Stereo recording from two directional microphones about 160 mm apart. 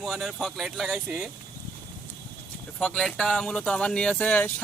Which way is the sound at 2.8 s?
5° left (ahead or behind).